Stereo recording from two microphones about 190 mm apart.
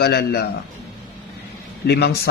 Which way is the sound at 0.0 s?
60° left (ahead or behind).